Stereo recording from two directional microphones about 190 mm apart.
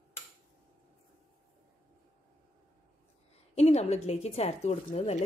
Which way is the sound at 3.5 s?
35° left (ahead or behind).